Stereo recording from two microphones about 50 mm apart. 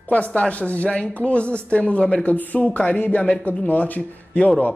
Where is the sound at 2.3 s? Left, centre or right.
Left.